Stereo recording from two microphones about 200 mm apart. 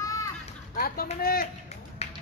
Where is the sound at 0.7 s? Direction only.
50° left (ahead or behind).